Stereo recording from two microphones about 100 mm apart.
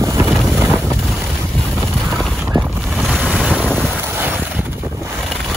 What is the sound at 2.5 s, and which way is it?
Boat, 40° right (ahead or behind).